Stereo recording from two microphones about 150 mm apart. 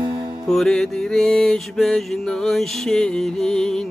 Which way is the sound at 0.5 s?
5° left (ahead or behind).